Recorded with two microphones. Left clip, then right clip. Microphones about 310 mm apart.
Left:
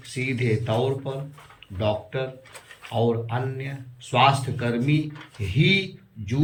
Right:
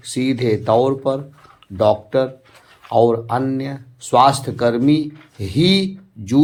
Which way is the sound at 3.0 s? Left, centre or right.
Centre.